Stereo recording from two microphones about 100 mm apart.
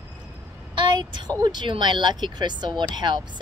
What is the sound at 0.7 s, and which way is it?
A woman's voice, 50° right (ahead or behind).